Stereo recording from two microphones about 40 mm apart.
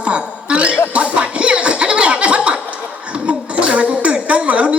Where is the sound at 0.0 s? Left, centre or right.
Right.